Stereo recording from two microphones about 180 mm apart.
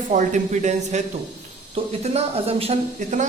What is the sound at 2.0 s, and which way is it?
Speech, 35° right (ahead or behind).